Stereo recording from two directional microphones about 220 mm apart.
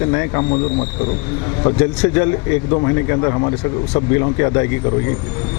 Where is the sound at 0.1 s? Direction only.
20° left (ahead or behind).